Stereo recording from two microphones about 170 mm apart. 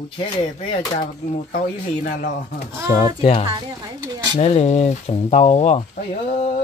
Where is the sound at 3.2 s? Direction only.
35° left (ahead or behind).